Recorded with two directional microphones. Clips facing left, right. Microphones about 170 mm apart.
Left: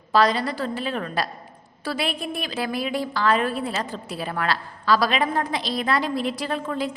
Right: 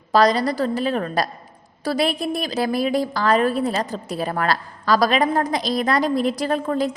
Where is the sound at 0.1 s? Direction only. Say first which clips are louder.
Right 3 dB; 40° right (ahead or behind).